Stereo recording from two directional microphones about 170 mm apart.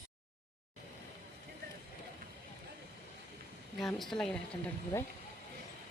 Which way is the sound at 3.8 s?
Centre (ahead or behind).